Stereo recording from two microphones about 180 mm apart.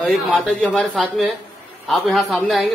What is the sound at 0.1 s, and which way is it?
Speech, 5° left (ahead or behind).